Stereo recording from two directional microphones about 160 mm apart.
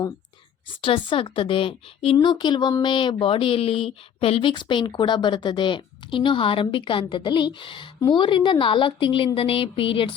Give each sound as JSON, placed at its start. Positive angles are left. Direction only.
{"t": 0.8, "sound": "speech", "side_deg": 35}